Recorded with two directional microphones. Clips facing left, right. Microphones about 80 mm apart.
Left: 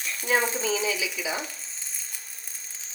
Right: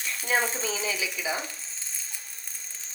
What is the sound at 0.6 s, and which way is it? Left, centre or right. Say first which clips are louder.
Speech: left 4 dB; right.